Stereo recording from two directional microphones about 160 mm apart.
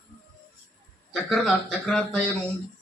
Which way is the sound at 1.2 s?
Centre (ahead or behind).